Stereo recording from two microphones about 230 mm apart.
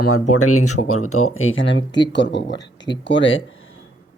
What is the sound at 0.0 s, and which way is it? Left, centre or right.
Speech, left.